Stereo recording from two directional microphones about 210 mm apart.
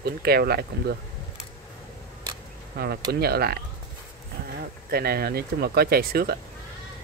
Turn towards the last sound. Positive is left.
turn(degrees=-45)  # may be behind; listen again after turning